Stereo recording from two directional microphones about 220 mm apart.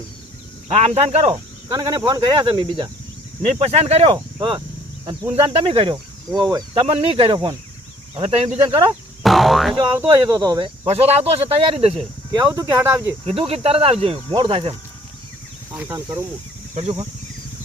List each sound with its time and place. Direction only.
0.7 s speech: 25° right (ahead or behind)
1.7 s speech: 15° right (ahead or behind)
9.2 s speech: centre (ahead or behind)
10.1 s speech: 15° right (ahead or behind)
10.8 s speech: 30° right (ahead or behind)
12.5 s speech: 15° right (ahead or behind)
13.2 s speech: 25° right (ahead or behind)
15.7 s speech: 10° right (ahead or behind)
16.7 s speech: 25° right (ahead or behind)